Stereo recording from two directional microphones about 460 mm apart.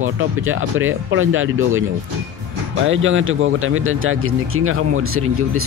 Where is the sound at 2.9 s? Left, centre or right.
Right.